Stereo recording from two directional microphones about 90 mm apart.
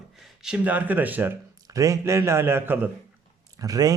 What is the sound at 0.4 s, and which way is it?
Speech, 15° right (ahead or behind).